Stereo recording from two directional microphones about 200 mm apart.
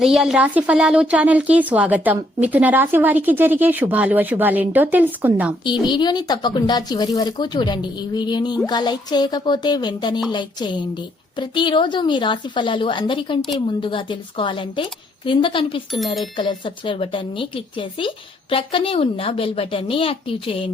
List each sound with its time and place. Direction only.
0.0 s a woman's voice: centre (ahead or behind)
5.8 s speech: 20° left (ahead or behind)